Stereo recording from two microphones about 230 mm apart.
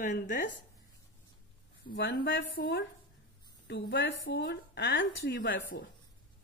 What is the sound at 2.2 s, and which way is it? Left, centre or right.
Speech, left.